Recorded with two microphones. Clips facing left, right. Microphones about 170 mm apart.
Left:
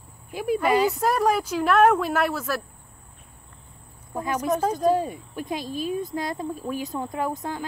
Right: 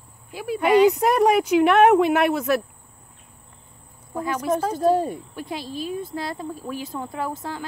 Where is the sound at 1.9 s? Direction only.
20° right (ahead or behind).